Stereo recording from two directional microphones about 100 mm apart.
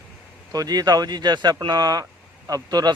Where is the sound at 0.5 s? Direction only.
40° right (ahead or behind).